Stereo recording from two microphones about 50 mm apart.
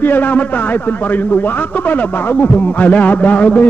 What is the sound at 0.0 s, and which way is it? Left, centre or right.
Music, left.